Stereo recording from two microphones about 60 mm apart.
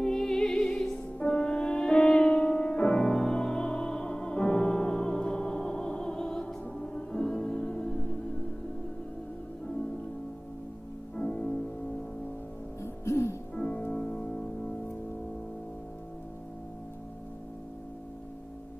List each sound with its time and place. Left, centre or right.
0.0 s music: centre
11.1 s music: centre
12.8 s music: left
13.6 s music: left